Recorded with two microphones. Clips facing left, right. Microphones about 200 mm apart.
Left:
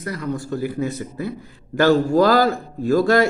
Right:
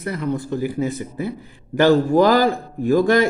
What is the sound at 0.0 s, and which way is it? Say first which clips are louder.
A man's voice: right 2 dB; 25° right (ahead or behind).